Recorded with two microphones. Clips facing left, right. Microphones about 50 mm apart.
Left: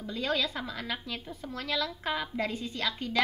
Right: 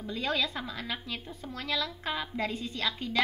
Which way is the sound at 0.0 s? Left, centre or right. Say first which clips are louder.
Even; centre.